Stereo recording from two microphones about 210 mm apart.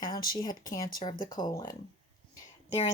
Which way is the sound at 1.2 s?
40° left (ahead or behind).